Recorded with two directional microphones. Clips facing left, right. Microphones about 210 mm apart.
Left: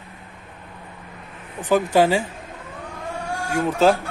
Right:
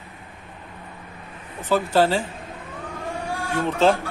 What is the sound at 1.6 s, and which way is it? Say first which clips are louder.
Speech: left 2 dB; 15° left (ahead or behind).